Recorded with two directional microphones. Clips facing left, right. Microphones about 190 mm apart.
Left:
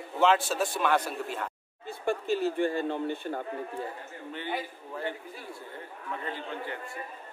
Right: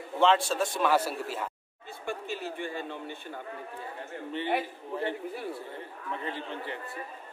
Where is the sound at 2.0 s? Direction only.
45° left (ahead or behind).